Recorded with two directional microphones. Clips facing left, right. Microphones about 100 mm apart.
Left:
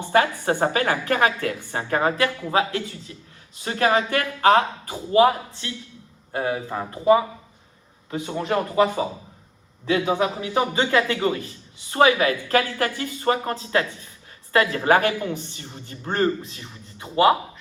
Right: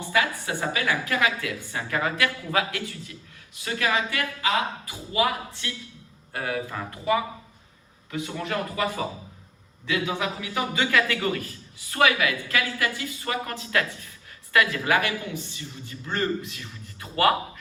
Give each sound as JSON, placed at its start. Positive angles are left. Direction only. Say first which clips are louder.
{"t": 0.1, "sound": "a woman's voice", "louder": "left 6 dB", "side_deg": 45}
{"t": 5.1, "sound": "a man's voice", "louder": "left 8 dB", "side_deg": 35}